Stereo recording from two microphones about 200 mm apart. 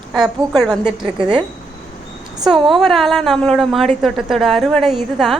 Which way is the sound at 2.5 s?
Centre (ahead or behind).